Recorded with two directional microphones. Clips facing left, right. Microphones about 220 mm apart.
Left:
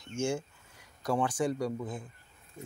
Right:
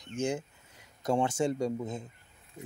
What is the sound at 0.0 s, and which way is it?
Speech, 20° right (ahead or behind).